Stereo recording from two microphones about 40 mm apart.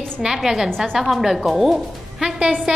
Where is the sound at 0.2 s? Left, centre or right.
Centre.